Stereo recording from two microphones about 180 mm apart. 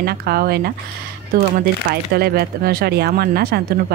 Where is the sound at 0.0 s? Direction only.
60° right (ahead or behind).